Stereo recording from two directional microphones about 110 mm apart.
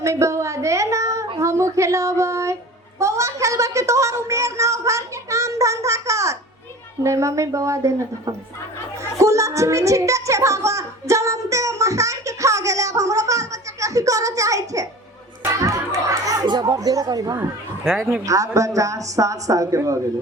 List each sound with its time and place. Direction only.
0.0 s a sound: 25° right (ahead or behind)
7.0 s a woman's voice: 25° right (ahead or behind)
9.1 s a sound: 30° right (ahead or behind)
15.6 s chatter: 30° right (ahead or behind)
17.8 s speech: centre (ahead or behind)
18.3 s a man's voice: 30° right (ahead or behind)